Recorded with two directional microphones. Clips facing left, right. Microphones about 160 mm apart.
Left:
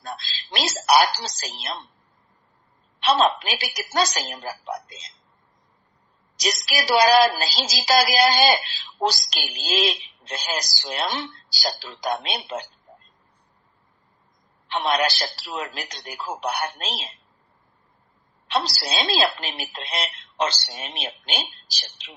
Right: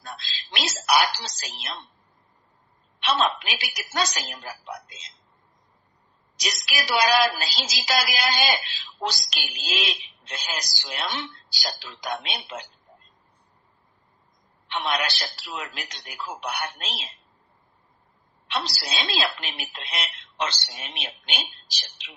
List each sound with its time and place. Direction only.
0.5 s music: 35° left (ahead or behind)
3.0 s music: 35° left (ahead or behind)
6.3 s music: 35° left (ahead or behind)
14.7 s music: 35° left (ahead or behind)
18.4 s music: 35° left (ahead or behind)